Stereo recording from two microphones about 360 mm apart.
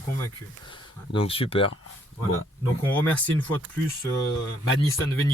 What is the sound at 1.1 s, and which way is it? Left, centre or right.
Speech, centre.